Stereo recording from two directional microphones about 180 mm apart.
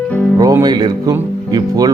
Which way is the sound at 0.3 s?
20° right (ahead or behind).